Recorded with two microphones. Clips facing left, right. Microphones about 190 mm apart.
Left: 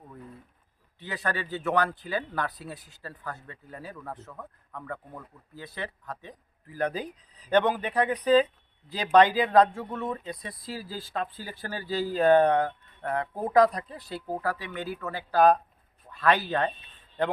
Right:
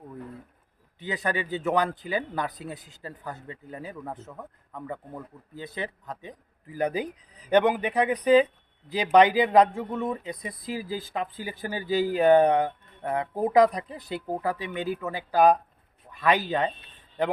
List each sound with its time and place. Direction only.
0.9 s speech: 20° right (ahead or behind)